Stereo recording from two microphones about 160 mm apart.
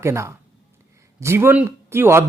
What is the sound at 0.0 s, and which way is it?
Speech, 15° right (ahead or behind).